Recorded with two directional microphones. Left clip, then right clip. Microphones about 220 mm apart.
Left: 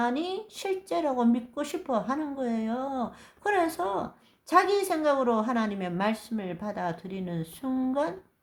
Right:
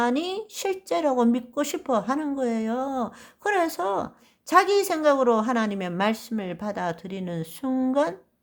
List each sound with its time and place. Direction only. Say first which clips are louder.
0.0 s speech: right 4 dB; 35° right (ahead or behind)